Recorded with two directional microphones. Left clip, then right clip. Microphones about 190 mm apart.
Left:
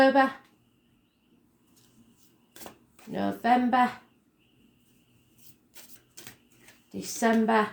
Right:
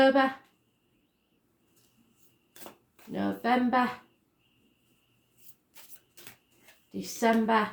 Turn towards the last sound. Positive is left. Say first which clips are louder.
# left 1 dB
turn(degrees=30)  # may be behind; listen again after turning